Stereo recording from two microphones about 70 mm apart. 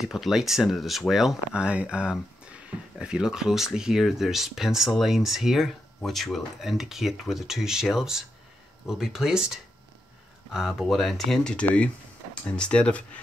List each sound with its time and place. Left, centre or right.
0.0 s speech: centre
1.5 s speech: centre
10.7 s speech: centre
11.5 s speech: centre